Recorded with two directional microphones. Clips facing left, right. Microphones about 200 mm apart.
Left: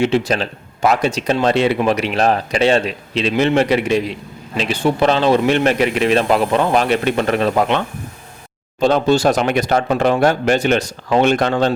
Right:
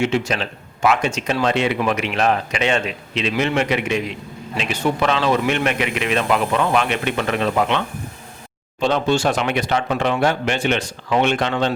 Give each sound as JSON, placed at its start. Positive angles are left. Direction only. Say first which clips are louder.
{"t": 0.0, "sound": "speech", "louder": "left 4 dB", "side_deg": 35}
{"t": 8.8, "sound": "speech", "louder": "left 4 dB", "side_deg": 40}